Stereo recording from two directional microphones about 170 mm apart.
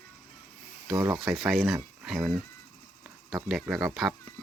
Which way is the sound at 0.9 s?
25° right (ahead or behind).